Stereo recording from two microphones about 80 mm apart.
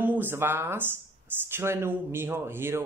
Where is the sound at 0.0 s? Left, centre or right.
Right.